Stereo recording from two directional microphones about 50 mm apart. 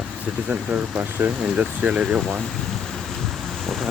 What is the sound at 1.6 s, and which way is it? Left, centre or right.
Speech, right.